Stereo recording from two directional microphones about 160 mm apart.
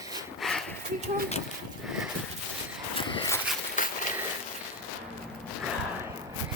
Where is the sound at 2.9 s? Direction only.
35° left (ahead or behind).